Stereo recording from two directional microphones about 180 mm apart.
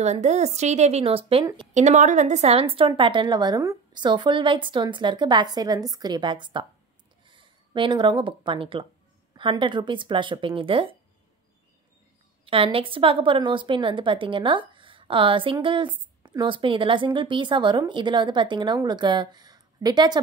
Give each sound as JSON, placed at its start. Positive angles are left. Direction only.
{"t": 0.0, "sound": "a woman's voice", "side_deg": -40}
{"t": 12.4, "sound": "a woman's voice", "side_deg": -30}